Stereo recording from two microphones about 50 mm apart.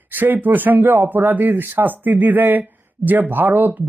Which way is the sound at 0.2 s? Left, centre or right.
Right.